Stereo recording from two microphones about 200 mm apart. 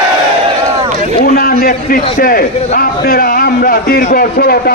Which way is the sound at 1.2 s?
50° left (ahead or behind).